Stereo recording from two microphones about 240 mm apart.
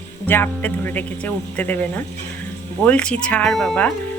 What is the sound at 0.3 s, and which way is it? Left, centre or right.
Speech, centre.